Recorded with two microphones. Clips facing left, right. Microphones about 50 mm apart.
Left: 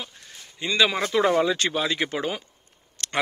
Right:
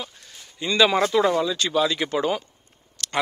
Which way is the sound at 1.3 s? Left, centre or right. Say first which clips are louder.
Left 2 dB; left.